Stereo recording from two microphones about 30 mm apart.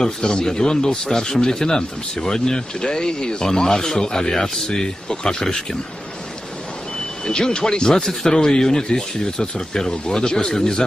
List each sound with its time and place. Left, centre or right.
0.0 s speech: left
7.2 s speech: left
8.1 s speech: centre
8.4 s speech: left